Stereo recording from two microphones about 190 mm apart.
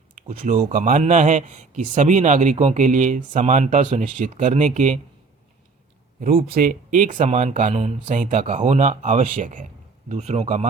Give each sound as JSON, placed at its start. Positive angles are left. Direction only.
{"t": 0.2, "sound": "speech", "side_deg": -40}
{"t": 6.1, "sound": "speech", "side_deg": -50}